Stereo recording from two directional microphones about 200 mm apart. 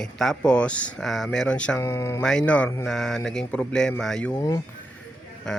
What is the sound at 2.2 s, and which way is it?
Speech, 5° left (ahead or behind).